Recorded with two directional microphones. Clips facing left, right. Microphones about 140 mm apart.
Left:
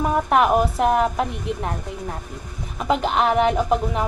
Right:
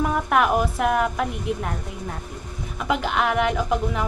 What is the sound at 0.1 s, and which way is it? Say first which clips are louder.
Speech: left 3 dB; 30° left (ahead or behind).